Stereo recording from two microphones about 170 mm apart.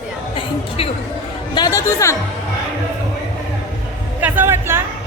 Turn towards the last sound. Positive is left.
turn(degrees=-15)  # may be behind; listen again after turning